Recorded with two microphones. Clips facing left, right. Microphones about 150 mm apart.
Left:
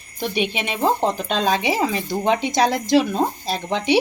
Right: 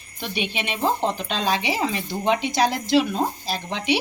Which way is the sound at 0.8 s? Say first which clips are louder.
Left 3 dB; 40° left (ahead or behind).